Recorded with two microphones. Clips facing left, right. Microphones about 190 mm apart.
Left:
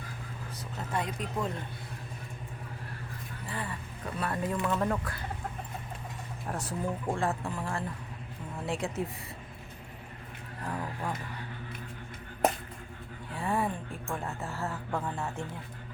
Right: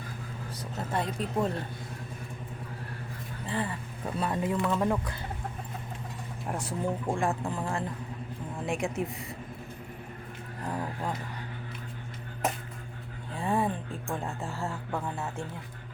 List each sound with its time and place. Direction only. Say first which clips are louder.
0.9 s speech: right 3 dB; 30° right (ahead or behind)
3.4 s speech: right 6 dB; 25° right (ahead or behind)
6.7 s speech: right 2 dB; 15° right (ahead or behind)
10.7 s vehicle: right 2 dB; 20° right (ahead or behind)
13.4 s a sound: right 2 dB; 20° right (ahead or behind)
14.1 s speech: right 1 dB; 15° right (ahead or behind)